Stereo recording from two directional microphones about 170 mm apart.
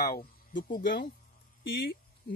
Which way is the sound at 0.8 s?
90° left.